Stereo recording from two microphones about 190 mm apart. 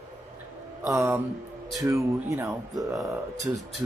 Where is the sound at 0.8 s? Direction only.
15° right (ahead or behind).